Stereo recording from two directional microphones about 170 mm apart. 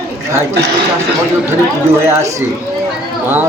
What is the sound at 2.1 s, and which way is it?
Speech, 20° right (ahead or behind).